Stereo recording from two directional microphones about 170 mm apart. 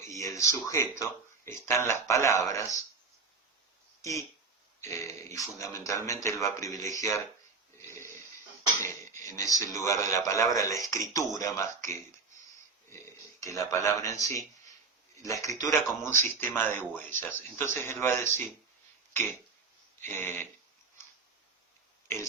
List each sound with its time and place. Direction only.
0.1 s speech: 20° left (ahead or behind)
4.0 s speech: 20° left (ahead or behind)
7.9 s a sound: 15° left (ahead or behind)
8.8 s speech: 15° left (ahead or behind)
12.9 s speech: 15° left (ahead or behind)
20.1 s speech: 15° left (ahead or behind)
22.0 s pig: 15° left (ahead or behind)